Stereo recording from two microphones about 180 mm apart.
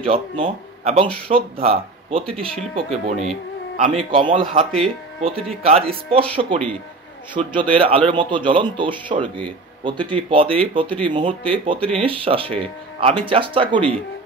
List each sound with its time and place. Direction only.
0.0 s speech: 30° right (ahead or behind)
2.2 s speech: 5° left (ahead or behind)
2.7 s speech: 35° right (ahead or behind)
7.4 s speech: 30° right (ahead or behind)